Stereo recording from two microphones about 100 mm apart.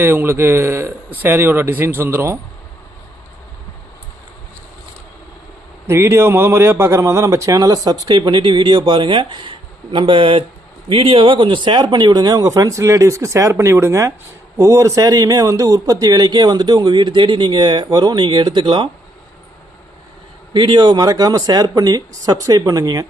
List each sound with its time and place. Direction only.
0.0 s speech: 20° right (ahead or behind)
5.9 s a man's voice: 25° right (ahead or behind); by 18.9 s 55° right (ahead or behind)
20.5 s a man's voice: 50° right (ahead or behind); by 23.0 s 35° right (ahead or behind)